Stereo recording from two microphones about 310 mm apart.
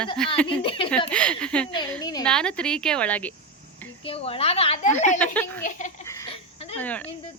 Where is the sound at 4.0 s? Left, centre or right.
Centre.